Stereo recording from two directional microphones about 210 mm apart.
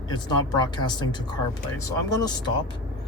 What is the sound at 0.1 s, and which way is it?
Speech, 20° left (ahead or behind).